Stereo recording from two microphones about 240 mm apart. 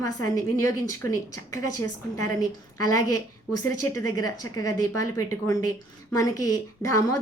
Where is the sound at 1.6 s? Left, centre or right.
Left.